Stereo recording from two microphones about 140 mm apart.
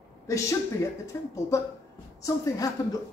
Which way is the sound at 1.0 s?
20° left (ahead or behind).